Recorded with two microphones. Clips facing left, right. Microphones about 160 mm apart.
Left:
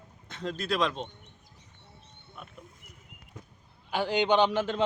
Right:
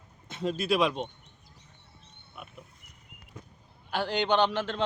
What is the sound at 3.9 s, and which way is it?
Speech, 10° left (ahead or behind).